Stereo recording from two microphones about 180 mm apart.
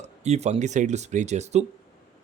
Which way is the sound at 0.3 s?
35° right (ahead or behind).